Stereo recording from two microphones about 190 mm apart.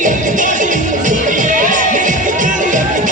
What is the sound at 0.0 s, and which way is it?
Music, 40° right (ahead or behind).